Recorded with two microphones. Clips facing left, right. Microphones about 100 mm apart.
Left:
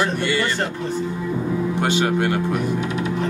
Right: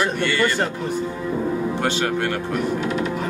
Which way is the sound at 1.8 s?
15° left (ahead or behind).